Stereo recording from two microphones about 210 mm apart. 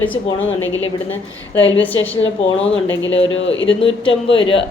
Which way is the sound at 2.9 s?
65° left (ahead or behind).